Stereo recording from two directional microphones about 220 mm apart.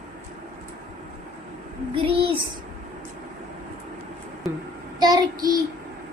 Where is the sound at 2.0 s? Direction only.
25° right (ahead or behind).